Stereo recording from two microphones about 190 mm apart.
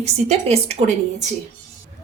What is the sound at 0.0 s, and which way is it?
Speech, 35° right (ahead or behind).